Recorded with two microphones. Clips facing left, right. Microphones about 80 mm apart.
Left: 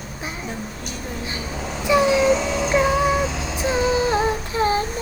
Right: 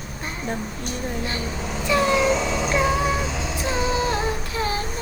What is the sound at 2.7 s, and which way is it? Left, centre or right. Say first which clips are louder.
Humming: left 4 dB; centre.